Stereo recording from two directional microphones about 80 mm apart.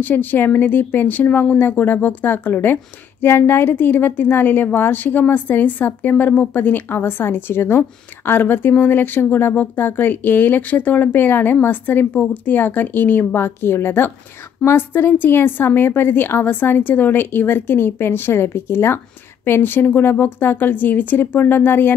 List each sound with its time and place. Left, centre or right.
0.0 s speech: left